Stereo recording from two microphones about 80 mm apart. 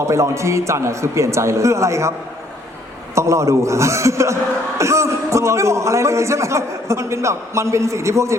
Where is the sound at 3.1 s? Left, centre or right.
Right.